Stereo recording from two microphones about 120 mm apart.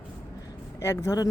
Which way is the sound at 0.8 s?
25° left (ahead or behind).